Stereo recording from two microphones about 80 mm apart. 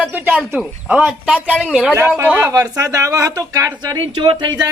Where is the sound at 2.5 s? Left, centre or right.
Right.